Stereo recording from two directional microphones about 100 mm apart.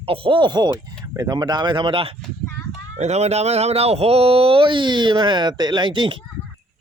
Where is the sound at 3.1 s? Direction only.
90° right; by 6.1 s 50° right (ahead or behind).